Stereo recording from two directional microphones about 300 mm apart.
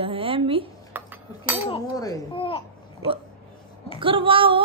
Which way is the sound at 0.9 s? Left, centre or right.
Centre.